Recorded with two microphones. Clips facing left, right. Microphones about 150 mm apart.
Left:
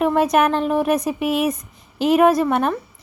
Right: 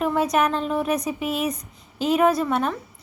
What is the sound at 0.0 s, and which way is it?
A woman's voice, 65° left (ahead or behind).